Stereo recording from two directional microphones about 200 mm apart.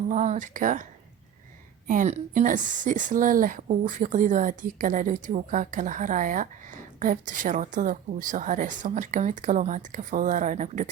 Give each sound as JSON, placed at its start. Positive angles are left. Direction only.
{"t": 0.1, "sound": "a woman's voice", "side_deg": -40}
{"t": 1.9, "sound": "a woman's voice", "side_deg": -40}